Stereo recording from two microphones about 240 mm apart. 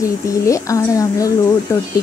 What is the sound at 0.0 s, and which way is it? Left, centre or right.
A woman's voice, centre.